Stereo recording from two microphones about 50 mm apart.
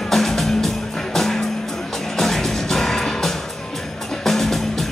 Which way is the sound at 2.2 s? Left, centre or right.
Centre.